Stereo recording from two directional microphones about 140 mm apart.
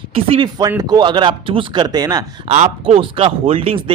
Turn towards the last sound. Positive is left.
turn(degrees=-40)  # may be behind; listen again after turning